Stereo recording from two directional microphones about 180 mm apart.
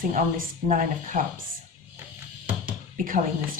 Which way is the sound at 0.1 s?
50° right (ahead or behind).